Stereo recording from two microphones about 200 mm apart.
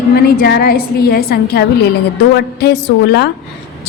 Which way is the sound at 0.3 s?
50° left (ahead or behind).